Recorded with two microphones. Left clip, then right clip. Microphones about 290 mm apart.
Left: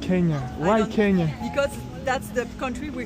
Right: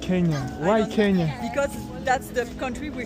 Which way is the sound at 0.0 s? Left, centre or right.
Centre.